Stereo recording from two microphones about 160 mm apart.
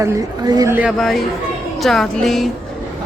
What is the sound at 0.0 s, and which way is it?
Speech, 20° right (ahead or behind).